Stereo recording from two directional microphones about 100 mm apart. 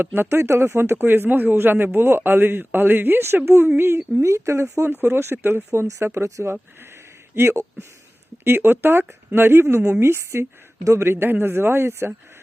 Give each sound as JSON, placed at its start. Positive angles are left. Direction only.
{"t": 0.0, "sound": "speech", "side_deg": -20}